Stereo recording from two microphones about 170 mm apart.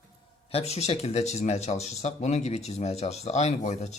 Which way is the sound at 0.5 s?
40° left (ahead or behind).